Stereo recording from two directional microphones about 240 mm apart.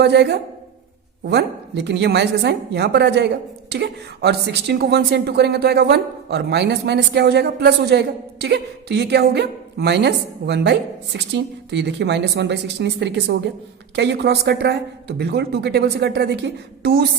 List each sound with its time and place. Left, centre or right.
0.0 s a woman's voice: right